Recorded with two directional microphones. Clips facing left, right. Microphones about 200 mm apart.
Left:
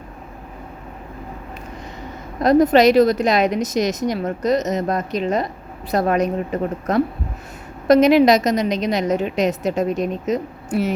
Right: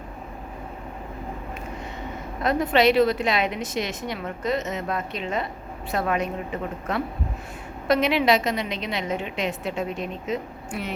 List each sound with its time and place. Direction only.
2.4 s a woman's voice: 40° left (ahead or behind)